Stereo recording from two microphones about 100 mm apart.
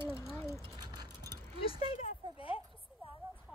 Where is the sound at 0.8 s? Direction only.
45° right (ahead or behind).